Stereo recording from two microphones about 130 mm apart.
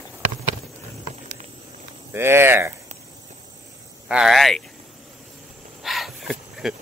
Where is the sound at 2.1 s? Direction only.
20° right (ahead or behind).